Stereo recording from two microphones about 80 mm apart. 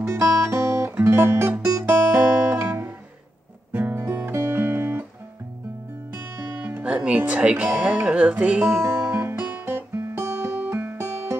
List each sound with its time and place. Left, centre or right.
0.0 s music: right
1.9 s guitar: right
3.7 s music: right
6.1 s music: centre